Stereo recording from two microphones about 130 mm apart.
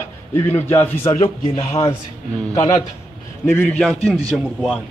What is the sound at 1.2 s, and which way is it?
Speech, 50° left (ahead or behind).